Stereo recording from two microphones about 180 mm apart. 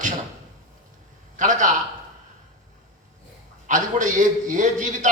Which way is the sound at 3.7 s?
45° right (ahead or behind).